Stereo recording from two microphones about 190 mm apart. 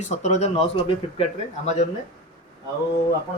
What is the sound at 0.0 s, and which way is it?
Speech, 35° left (ahead or behind).